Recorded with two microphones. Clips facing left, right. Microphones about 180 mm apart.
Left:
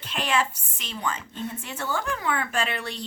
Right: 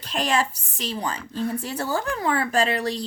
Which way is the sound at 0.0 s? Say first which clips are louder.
Right 2 dB; 40° right (ahead or behind).